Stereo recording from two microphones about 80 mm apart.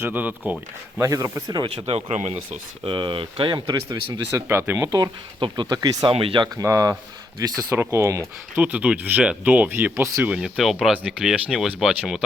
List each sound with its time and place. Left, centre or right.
0.0 s speech: right
1.1 s speech: right
2.8 s speech: right
3.8 s speech: right
4.8 s speech: right
5.4 s speech: right
6.1 s speech: right
6.6 s speech: right
7.8 s speech: right
8.5 s speech: centre
9.6 s speech: right
10.3 s speech: centre
10.9 s speech: centre